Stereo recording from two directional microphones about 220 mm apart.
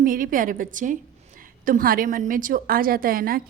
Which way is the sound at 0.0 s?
40° right (ahead or behind).